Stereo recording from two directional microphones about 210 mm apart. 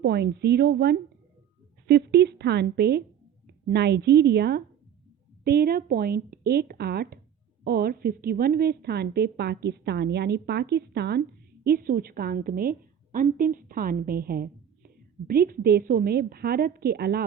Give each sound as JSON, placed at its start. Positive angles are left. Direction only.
{"t": 0.0, "sound": "a woman's voice", "side_deg": -50}